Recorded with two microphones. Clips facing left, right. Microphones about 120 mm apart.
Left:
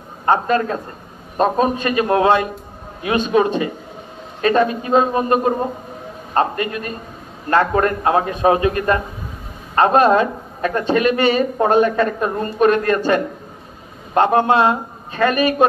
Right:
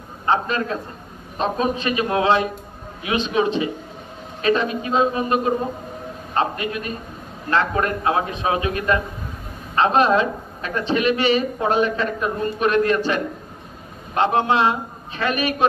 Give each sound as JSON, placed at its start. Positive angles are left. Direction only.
{"t": 0.2, "sound": "a man's voice", "side_deg": 45}